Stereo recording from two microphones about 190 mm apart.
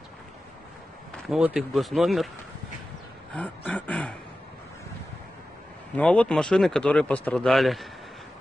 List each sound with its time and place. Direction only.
1.2 s speech: 5° right (ahead or behind)
3.3 s a sound: 5° left (ahead or behind)
5.9 s speech: 5° left (ahead or behind)